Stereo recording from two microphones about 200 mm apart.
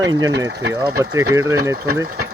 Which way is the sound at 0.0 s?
20° right (ahead or behind).